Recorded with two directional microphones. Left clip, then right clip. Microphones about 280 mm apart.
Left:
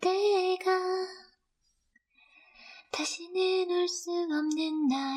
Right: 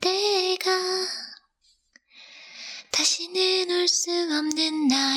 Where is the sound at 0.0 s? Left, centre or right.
Right.